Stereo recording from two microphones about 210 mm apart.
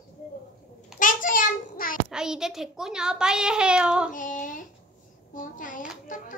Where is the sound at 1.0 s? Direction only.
40° left (ahead or behind).